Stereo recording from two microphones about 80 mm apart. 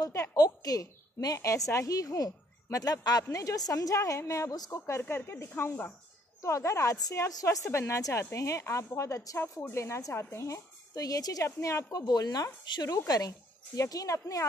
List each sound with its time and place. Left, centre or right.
0.1 s a woman's voice: left
3.3 s a woman's voice: left
5.0 s a woman's voice: left
9.6 s a woman's voice: left
11.4 s a woman's voice: left
11.9 s speech: left
12.6 s speech: left
12.9 s a woman's voice: left